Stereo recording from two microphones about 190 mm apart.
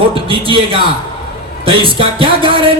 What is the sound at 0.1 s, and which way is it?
A man's voice, 25° right (ahead or behind).